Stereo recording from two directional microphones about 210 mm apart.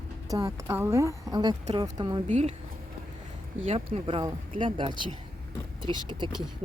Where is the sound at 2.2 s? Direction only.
35° right (ahead or behind).